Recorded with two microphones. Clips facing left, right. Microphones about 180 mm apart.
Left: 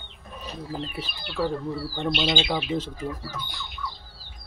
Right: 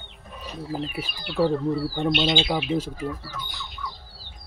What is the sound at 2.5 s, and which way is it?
Speech, 5° right (ahead or behind).